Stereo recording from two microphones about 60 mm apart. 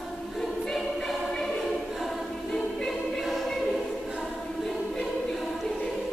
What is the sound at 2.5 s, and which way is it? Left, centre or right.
Music, centre.